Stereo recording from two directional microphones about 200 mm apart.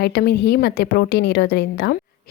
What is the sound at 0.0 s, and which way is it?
A woman's voice, 55° left (ahead or behind).